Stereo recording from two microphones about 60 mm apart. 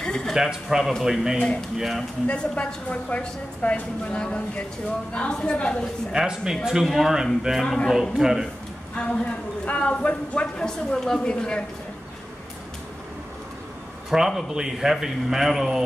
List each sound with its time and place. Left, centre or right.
0.0 s a sound: centre
0.3 s speech: centre
2.2 s a woman's voice: centre
6.1 s speech: centre
7.6 s a woman's voice: centre
7.9 s speech: centre
9.0 s a woman's voice: centre
14.1 s speech: centre